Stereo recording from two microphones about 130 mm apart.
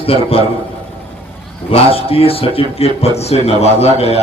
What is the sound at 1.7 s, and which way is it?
A man's voice, 45° left (ahead or behind).